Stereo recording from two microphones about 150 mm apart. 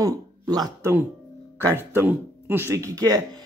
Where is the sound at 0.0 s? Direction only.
25° right (ahead or behind).